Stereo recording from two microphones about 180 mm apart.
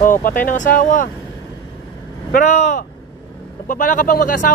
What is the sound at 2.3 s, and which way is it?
Speech, 45° left (ahead or behind).